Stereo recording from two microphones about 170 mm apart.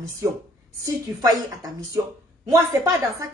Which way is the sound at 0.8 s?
20° right (ahead or behind).